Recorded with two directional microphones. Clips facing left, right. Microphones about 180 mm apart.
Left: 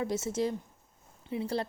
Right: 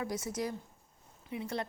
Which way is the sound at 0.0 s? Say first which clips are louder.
Left 5 dB; 25° left (ahead or behind).